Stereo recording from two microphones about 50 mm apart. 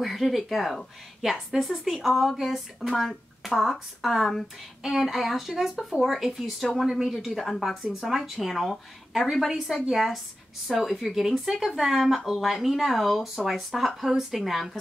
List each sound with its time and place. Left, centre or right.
0.0 s speech: centre